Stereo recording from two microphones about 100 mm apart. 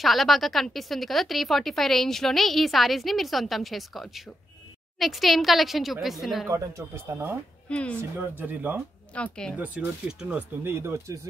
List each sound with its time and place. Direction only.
0.0 s speech: centre (ahead or behind)
7.1 s speech: 20° right (ahead or behind)
9.1 s speech: 10° left (ahead or behind)
9.6 s speech: 15° right (ahead or behind)
10.6 s speech: 25° right (ahead or behind)